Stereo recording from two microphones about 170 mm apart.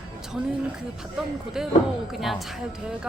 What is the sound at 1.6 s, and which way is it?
Speech, centre (ahead or behind).